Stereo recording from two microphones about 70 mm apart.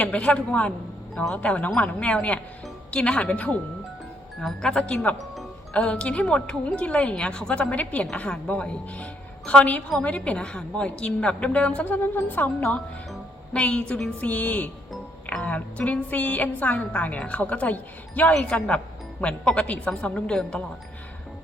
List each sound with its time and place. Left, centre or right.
0.0 s a woman's voice: centre
4.4 s a woman's voice: centre; by 12.6 s left
13.5 s a woman's voice: centre
18.3 s a woman's voice: centre